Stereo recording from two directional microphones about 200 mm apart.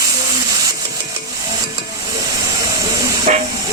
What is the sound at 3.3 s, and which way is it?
Steam, 35° right (ahead or behind).